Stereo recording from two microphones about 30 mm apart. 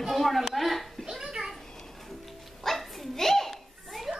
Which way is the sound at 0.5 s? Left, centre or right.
Centre.